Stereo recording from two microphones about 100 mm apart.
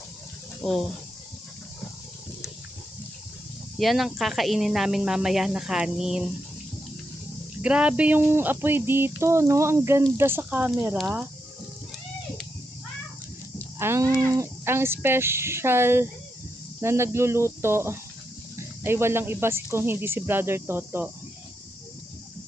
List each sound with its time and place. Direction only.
0.6 s speech: 5° left (ahead or behind)
3.8 s speech: centre (ahead or behind)
7.6 s speech: 10° right (ahead or behind)
13.7 s speech: 25° right (ahead or behind)